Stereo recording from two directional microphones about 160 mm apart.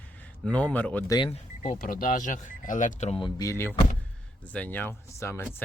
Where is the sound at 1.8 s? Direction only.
60° left (ahead or behind); by 3.3 s 35° left (ahead or behind).